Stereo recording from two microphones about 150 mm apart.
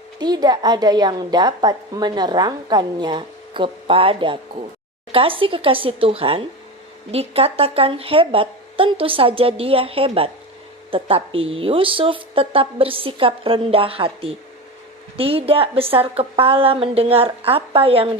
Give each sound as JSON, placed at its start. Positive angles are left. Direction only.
{"t": 0.2, "sound": "a woman's voice", "side_deg": -25}